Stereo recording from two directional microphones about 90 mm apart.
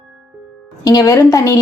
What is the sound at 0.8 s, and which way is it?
Speech, 45° left (ahead or behind).